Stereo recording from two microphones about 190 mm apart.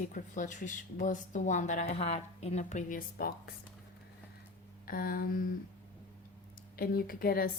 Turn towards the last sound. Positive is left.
turn(degrees=50)  # may be behind; listen again after turning